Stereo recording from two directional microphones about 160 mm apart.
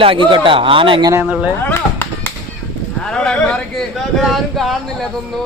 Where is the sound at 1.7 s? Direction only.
15° left (ahead or behind).